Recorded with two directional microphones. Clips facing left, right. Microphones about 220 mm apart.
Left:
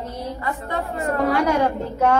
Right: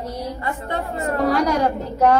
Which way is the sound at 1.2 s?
40° right (ahead or behind).